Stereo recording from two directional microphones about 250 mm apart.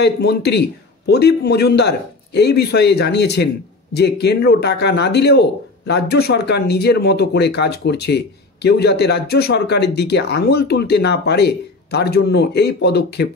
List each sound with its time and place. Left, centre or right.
0.0 s a man's voice: left